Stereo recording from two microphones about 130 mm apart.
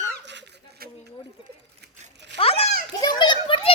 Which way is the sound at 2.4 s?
50° left (ahead or behind).